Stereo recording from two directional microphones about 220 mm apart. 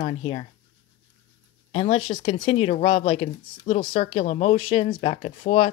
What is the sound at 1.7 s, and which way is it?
Speech, 25° left (ahead or behind).